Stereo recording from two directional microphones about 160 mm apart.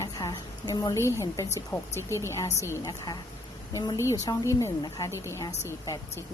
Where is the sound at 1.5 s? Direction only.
15° left (ahead or behind).